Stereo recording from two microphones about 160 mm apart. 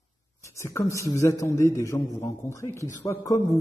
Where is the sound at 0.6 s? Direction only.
20° left (ahead or behind).